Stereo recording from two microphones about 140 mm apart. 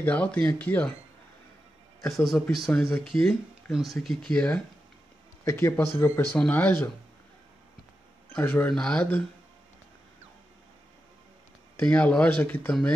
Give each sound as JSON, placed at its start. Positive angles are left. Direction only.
{"t": 0.0, "sound": "speech", "side_deg": 10}
{"t": 2.0, "sound": "speech", "side_deg": 0}
{"t": 5.4, "sound": "speech", "side_deg": 20}
{"t": 8.4, "sound": "speech", "side_deg": 10}
{"t": 11.7, "sound": "speech", "side_deg": 10}